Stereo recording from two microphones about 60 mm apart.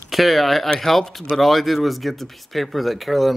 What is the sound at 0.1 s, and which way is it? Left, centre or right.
Speech, centre.